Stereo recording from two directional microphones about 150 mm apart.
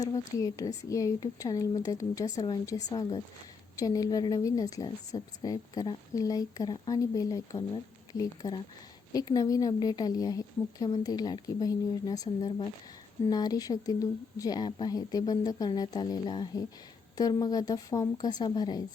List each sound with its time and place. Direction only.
0.0 s a woman's voice: 20° left (ahead or behind)